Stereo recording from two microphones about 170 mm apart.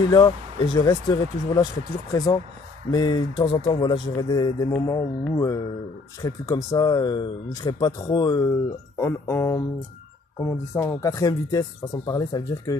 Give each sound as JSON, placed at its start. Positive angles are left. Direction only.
{"t": 0.1, "sound": "speech", "side_deg": 25}